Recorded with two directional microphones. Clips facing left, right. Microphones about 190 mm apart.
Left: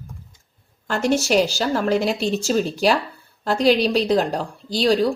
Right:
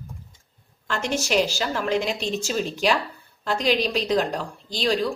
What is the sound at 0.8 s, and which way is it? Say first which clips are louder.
A woman's voice: left 6 dB; 40° left (ahead or behind).